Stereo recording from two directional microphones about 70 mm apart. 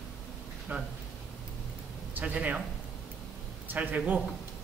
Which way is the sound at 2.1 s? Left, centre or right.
Centre.